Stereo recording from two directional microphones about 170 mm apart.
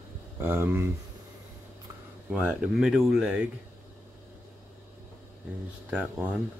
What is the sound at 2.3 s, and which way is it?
Speech, 5° right (ahead or behind).